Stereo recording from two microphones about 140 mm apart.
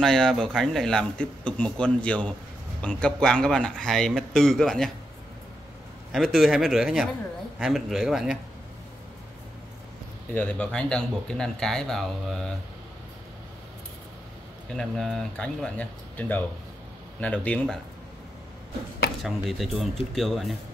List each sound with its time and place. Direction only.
0.0 s speech: 5° left (ahead or behind)
6.1 s speech: centre (ahead or behind)
10.3 s speech: 10° left (ahead or behind)
14.7 s speech: 5° left (ahead or behind)
19.2 s speech: centre (ahead or behind)